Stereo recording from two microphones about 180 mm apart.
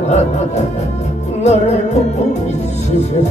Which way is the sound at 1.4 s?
40° left (ahead or behind).